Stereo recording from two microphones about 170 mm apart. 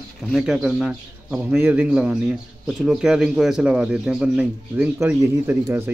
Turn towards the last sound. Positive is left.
turn(degrees=-15)  # may be behind; listen again after turning